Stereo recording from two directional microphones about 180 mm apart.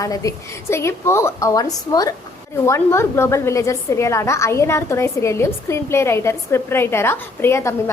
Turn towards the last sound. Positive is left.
turn(degrees=15)  # may be behind; listen again after turning